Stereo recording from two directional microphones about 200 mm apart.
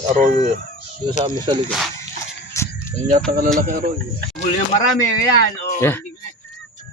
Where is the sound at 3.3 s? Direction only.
45° right (ahead or behind).